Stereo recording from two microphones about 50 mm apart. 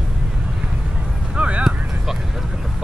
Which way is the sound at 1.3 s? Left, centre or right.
Right.